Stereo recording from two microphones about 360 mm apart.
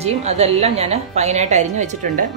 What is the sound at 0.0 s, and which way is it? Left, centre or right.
A woman's voice, centre.